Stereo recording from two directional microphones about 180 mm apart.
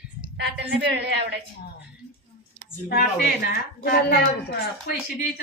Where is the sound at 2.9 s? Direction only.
55° left (ahead or behind).